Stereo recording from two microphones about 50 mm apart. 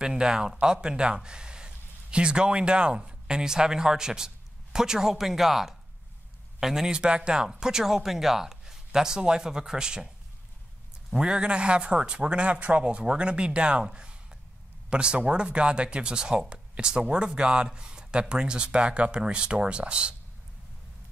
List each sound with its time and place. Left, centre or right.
0.0 s speech: centre
11.1 s speech: centre